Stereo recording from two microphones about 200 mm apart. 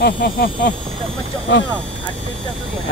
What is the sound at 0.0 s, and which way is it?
Hiss, 50° left (ahead or behind).